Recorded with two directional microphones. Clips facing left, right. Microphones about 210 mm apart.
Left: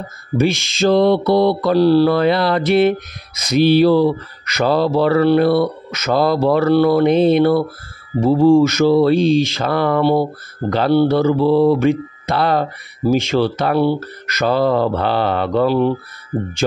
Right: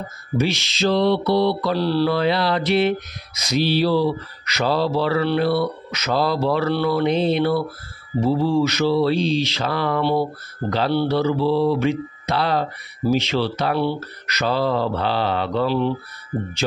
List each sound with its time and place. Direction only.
0.4 s speech: 50° left (ahead or behind)